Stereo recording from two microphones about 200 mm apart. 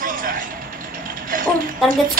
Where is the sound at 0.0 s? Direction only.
45° right (ahead or behind).